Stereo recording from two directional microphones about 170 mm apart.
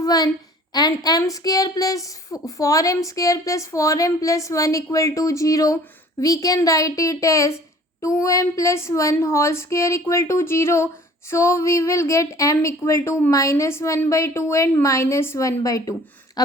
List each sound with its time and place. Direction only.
0.0 s a woman's voice: 20° left (ahead or behind)